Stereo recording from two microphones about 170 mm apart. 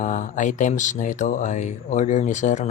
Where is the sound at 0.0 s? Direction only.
50° left (ahead or behind).